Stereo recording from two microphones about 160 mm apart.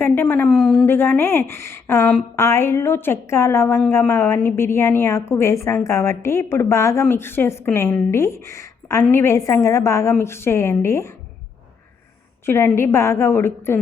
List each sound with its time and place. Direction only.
0.0 s a woman's voice: 15° left (ahead or behind)
12.5 s a woman's voice: 15° left (ahead or behind)